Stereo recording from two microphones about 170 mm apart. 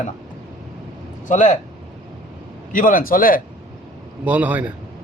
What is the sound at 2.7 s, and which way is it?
Speech, 50° left (ahead or behind).